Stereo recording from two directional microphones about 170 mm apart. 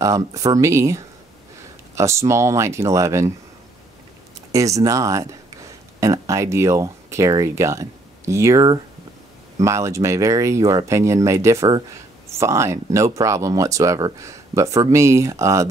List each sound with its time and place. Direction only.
0.0 s speech: 20° right (ahead or behind)
4.5 s speech: 20° right (ahead or behind)